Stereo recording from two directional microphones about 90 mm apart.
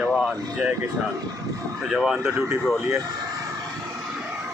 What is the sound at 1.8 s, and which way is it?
Speech, 5° right (ahead or behind).